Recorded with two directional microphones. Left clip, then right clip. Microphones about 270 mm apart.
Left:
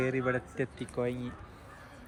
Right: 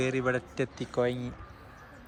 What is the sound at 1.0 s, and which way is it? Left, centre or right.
Speech, right.